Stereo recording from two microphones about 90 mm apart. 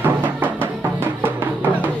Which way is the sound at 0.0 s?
25° right (ahead or behind).